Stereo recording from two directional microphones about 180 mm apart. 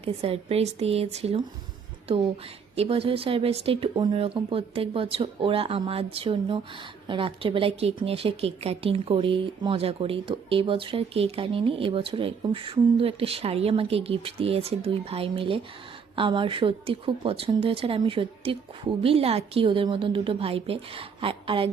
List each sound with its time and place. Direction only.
0.0 s speech: 35° right (ahead or behind)
2.7 s a woman's voice: 35° right (ahead or behind)